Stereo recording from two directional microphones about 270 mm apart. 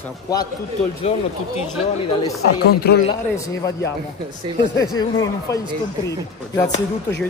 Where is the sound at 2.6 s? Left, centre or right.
Left.